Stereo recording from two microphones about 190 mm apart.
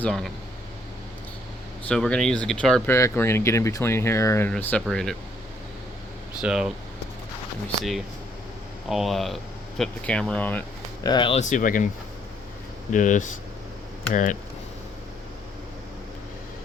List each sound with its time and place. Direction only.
0.0 s speech: 5° left (ahead or behind)
1.9 s speech: 5° left (ahead or behind)
6.4 s speech: 5° right (ahead or behind)
8.9 s speech: centre (ahead or behind)
11.0 s speech: 25° left (ahead or behind)
11.3 s speech: 40° left (ahead or behind)
12.9 s speech: 40° left (ahead or behind)